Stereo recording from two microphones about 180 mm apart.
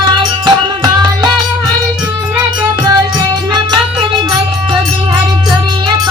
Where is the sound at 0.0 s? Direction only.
25° right (ahead or behind).